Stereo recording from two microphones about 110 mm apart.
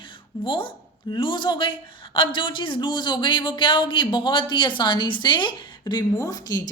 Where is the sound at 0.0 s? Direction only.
50° left (ahead or behind).